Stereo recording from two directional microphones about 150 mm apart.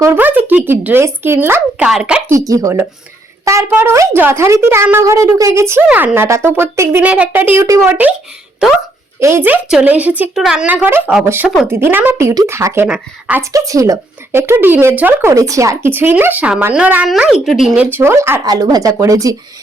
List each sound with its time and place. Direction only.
0.0 s a woman's voice: 15° right (ahead or behind)
2.5 s speech: 20° right (ahead or behind)
8.6 s a woman's voice: 5° right (ahead or behind)
13.4 s speech: 20° right (ahead or behind); by 17.8 s centre (ahead or behind)
17.9 s speech: 15° right (ahead or behind)